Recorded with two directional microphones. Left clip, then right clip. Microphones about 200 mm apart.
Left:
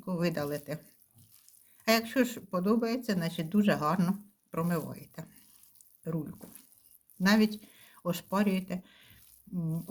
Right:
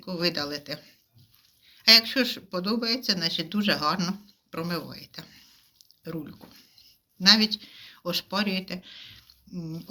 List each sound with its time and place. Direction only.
0.0 s speech: 45° left (ahead or behind)
0.5 s speech: 35° left (ahead or behind)
1.6 s speech: 45° left (ahead or behind)